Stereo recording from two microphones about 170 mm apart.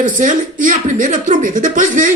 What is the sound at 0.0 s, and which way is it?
Speech, 50° right (ahead or behind).